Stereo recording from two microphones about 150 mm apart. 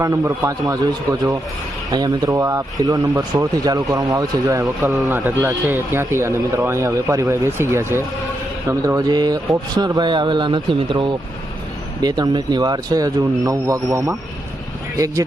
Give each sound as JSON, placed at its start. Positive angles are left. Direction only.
{"t": 0.0, "sound": "speech", "side_deg": -20}
{"t": 1.9, "sound": "a man's voice", "side_deg": -25}